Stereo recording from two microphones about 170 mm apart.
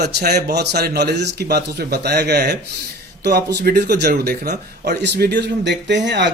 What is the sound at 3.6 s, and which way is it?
Speech, 70° right (ahead or behind).